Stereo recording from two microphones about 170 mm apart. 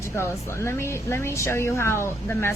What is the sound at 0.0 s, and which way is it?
Speech, 15° left (ahead or behind).